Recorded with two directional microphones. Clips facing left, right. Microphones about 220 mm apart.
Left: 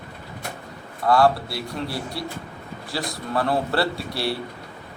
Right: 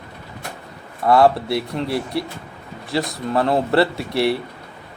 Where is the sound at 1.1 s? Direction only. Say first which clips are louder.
Right 4 dB; 20° right (ahead or behind).